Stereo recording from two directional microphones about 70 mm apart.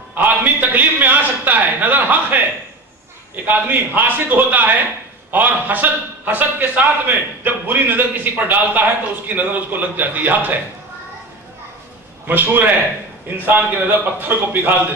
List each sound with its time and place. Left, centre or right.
0.1 s a sound: right
3.4 s a man's voice: right
12.3 s a man's voice: right
14.2 s a man's voice: right